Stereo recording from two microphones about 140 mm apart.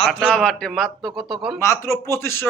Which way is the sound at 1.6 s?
20° left (ahead or behind).